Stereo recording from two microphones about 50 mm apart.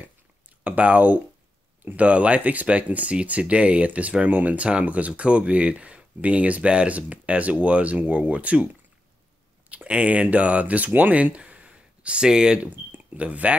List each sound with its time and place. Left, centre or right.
0.7 s speech: right
9.8 s speech: right
11.3 s a sound: right
12.6 s speech: right